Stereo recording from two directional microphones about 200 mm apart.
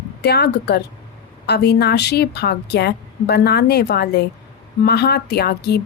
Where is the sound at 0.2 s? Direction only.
55° left (ahead or behind).